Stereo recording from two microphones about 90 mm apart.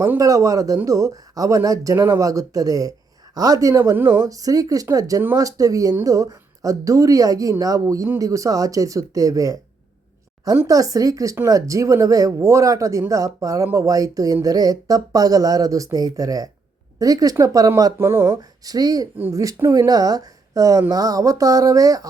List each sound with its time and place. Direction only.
0.2 s speech: 40° right (ahead or behind)
3.9 s speech: 25° right (ahead or behind)
4.3 s speech: 40° right (ahead or behind)
10.7 s speech: 40° right (ahead or behind)
18.0 s speech: 30° right (ahead or behind)
18.6 s speech: 45° right (ahead or behind)